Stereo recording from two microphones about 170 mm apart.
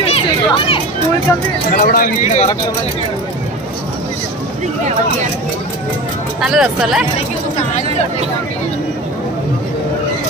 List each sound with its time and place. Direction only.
0.1 s chatter: 30° left (ahead or behind)
1.7 s speech: 55° left (ahead or behind)
6.4 s speech: 5° right (ahead or behind)